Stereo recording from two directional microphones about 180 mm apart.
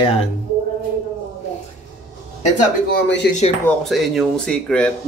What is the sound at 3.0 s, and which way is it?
Speech, 75° left (ahead or behind).